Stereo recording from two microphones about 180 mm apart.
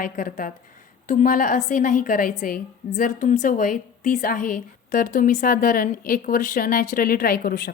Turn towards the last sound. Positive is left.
turn(degrees=50)  # may be behind; listen again after turning